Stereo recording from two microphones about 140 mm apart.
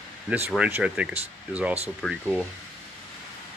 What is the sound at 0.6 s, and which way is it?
Speech, 10° right (ahead or behind).